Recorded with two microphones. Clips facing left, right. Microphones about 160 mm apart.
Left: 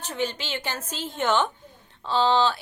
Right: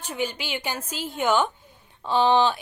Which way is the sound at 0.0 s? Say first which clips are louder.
Even; 10° right (ahead or behind).